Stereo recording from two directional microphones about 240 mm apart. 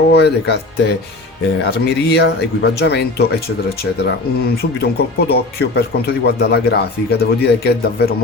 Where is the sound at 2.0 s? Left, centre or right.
Left.